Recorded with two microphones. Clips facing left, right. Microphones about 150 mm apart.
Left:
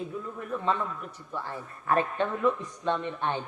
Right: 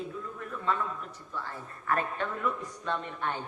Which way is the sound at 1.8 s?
20° left (ahead or behind).